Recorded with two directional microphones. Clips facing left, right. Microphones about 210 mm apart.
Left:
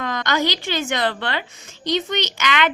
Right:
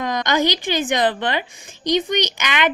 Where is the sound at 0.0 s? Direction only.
15° right (ahead or behind).